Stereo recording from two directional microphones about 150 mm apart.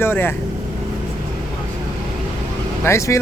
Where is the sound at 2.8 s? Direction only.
20° left (ahead or behind).